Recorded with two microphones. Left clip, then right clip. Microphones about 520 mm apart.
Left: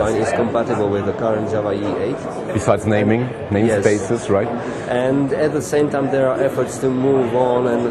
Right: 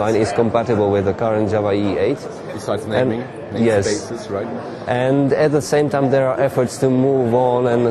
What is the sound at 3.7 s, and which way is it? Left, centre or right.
Speech, right.